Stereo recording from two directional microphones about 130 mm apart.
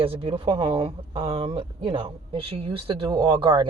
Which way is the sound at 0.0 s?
45° right (ahead or behind).